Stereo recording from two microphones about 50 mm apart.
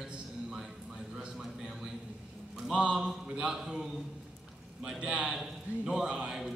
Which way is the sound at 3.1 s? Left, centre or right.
Centre.